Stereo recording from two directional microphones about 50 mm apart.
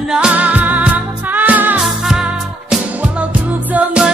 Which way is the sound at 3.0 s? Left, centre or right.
Right.